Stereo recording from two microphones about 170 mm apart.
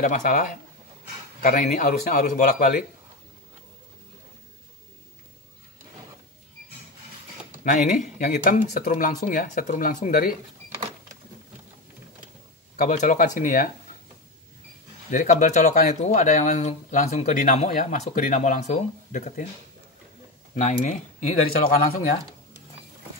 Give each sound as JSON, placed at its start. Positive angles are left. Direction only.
{"t": 0.0, "sound": "speech", "side_deg": 45}
{"t": 1.4, "sound": "speech", "side_deg": 50}
{"t": 7.6, "sound": "speech", "side_deg": 45}
{"t": 12.7, "sound": "speech", "side_deg": 50}
{"t": 15.0, "sound": "speech", "side_deg": 45}
{"t": 20.6, "sound": "speech", "side_deg": 45}